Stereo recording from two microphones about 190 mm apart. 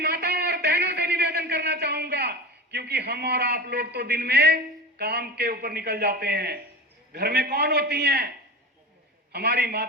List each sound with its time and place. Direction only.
0.0 s a sound: 55° right (ahead or behind)
7.1 s a man's voice: 60° right (ahead or behind)
9.3 s a man's voice: 60° right (ahead or behind)